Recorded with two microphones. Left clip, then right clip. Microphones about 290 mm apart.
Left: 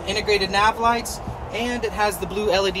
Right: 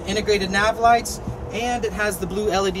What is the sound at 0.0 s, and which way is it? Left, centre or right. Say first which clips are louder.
Speech: even; centre.